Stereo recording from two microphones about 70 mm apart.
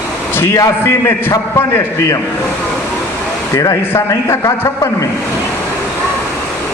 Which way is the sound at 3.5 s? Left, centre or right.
Left.